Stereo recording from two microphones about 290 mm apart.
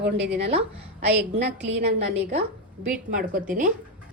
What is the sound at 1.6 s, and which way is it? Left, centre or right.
A woman's voice, right.